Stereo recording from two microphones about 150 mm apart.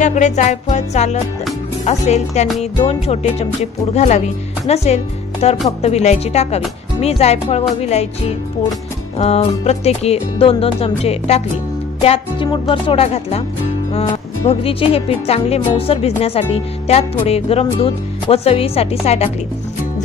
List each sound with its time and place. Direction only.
0.0 s music: 55° left (ahead or behind)
9.2 s music: 45° left (ahead or behind)
12.0 s speech: 40° left (ahead or behind)
14.6 s speech: 40° left (ahead or behind)